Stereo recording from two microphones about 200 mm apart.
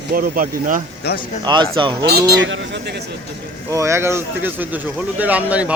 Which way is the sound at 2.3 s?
65° right (ahead or behind).